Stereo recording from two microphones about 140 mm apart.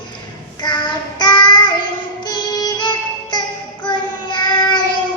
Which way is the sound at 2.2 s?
30° left (ahead or behind).